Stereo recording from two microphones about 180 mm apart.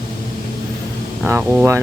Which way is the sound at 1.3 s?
10° right (ahead or behind).